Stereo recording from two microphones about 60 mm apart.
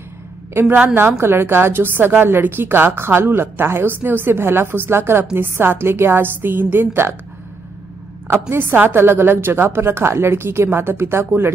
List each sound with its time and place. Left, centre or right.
0.9 s a woman's voice: right
8.3 s a woman's voice: right